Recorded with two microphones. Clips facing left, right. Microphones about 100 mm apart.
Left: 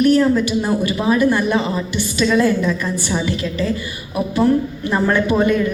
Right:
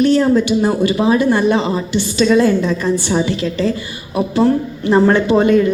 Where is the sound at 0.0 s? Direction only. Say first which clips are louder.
Right 1 dB; 25° right (ahead or behind).